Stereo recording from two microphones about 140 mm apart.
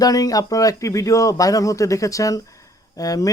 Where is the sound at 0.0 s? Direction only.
25° left (ahead or behind).